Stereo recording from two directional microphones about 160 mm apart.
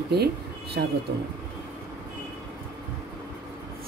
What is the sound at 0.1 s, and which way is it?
Speech, 85° right.